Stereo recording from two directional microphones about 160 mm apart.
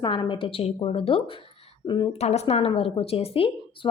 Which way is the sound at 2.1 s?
40° left (ahead or behind).